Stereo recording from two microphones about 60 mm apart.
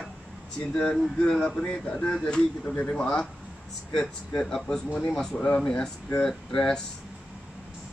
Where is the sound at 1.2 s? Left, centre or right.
Centre.